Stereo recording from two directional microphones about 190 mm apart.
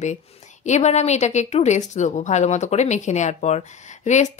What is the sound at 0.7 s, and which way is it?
A woman's voice, 35° left (ahead or behind).